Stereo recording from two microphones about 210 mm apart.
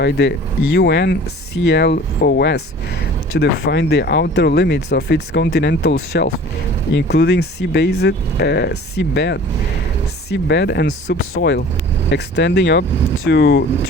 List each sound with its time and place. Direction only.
0.0 s speech: 55° left (ahead or behind)